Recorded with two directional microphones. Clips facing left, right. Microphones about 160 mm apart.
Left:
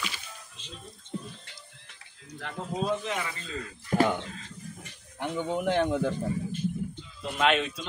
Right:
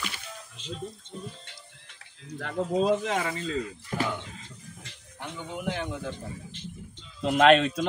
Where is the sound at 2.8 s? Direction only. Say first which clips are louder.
Right 2 dB; 90° right.